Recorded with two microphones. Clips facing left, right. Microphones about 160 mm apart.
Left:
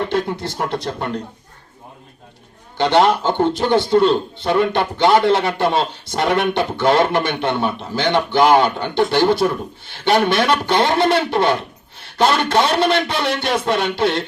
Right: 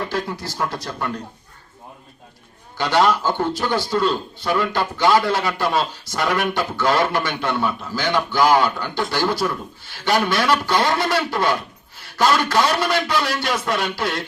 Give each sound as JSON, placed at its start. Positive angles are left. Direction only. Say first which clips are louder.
{"t": 0.0, "sound": "a man's voice", "louder": "left 5 dB", "side_deg": 25}
{"t": 2.7, "sound": "a man's voice", "louder": "left 3 dB", "side_deg": 25}